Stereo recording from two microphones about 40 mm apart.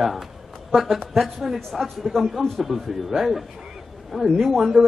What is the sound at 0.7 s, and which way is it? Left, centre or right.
A woman's voice, centre.